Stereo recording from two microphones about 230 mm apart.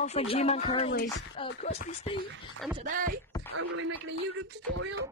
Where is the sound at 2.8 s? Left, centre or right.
Right.